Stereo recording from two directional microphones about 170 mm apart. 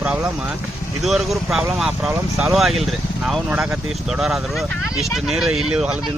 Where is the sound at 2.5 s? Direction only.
Centre (ahead or behind).